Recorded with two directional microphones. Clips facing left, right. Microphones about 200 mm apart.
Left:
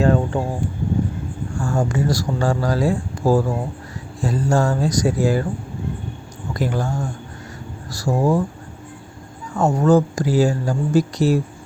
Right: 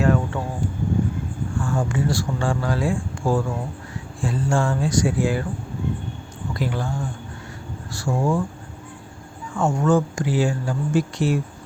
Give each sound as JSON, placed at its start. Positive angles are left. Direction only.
{"t": 0.0, "sound": "a sound", "side_deg": 30}
{"t": 1.5, "sound": "speech", "side_deg": 40}
{"t": 6.5, "sound": "speech", "side_deg": 45}
{"t": 9.6, "sound": "speech", "side_deg": 35}